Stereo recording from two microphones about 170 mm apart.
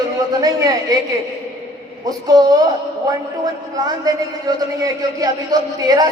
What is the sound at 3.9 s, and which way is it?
A man's voice, 20° right (ahead or behind).